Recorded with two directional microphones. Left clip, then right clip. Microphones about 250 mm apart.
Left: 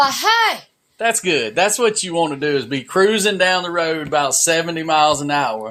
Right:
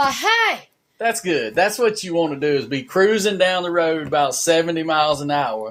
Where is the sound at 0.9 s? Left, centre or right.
Left.